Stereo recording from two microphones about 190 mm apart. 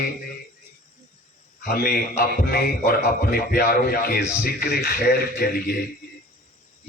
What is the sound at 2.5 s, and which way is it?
A man's voice, 55° left (ahead or behind).